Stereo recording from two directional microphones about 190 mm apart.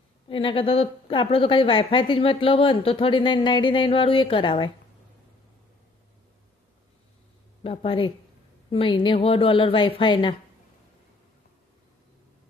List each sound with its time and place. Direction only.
0.3 s a woman's voice: 25° left (ahead or behind)
7.6 s a woman's voice: 30° left (ahead or behind)